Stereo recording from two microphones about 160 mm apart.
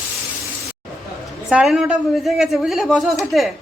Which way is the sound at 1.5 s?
5° right (ahead or behind).